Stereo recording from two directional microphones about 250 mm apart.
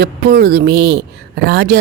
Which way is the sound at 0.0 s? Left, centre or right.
Right.